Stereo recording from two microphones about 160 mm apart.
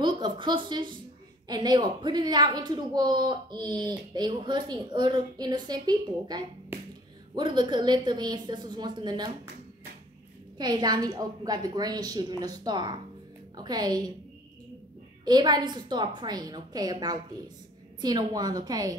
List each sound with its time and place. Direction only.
0.0 s speech: 30° right (ahead or behind)
10.6 s speech: 25° right (ahead or behind)
15.2 s speech: 25° right (ahead or behind)